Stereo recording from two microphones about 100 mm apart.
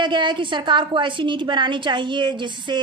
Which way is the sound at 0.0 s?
50° right (ahead or behind).